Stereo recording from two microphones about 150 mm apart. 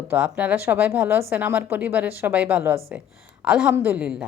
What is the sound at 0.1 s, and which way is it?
A woman's voice, 10° right (ahead or behind).